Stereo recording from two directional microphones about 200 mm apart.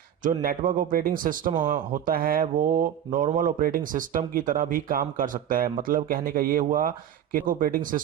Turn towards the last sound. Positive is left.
turn(degrees=-45)  # may be behind; listen again after turning